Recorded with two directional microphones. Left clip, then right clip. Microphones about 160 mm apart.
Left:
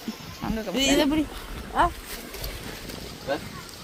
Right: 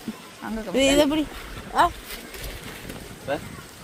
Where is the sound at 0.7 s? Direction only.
65° right (ahead or behind); by 1.2 s 80° right.